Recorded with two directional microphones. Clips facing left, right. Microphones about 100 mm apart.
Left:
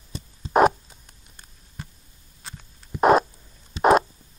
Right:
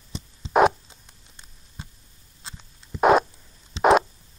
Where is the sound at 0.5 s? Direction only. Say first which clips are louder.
Even; centre (ahead or behind).